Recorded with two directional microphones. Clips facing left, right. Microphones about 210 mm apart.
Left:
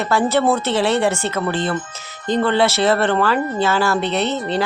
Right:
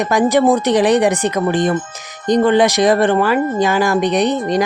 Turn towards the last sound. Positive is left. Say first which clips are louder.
# right 5 dB
turn(degrees=-15)  # may be behind; listen again after turning